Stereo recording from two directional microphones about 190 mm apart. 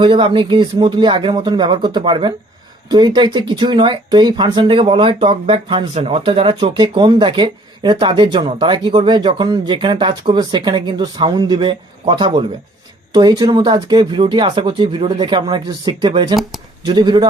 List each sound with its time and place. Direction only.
0.0 s speech: 25° right (ahead or behind)
16.3 s speech: centre (ahead or behind)
16.8 s speech: 25° right (ahead or behind)